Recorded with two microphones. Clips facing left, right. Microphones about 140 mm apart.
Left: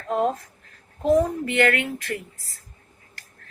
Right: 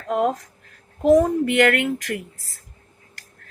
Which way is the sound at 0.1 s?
65° right (ahead or behind).